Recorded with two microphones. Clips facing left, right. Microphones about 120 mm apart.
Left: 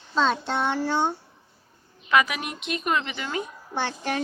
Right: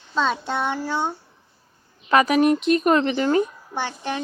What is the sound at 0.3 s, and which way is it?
Speech, 10° right (ahead or behind).